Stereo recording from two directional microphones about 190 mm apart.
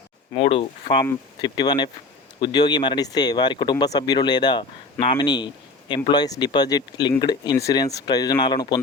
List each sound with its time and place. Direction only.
0.3 s speech: 30° left (ahead or behind)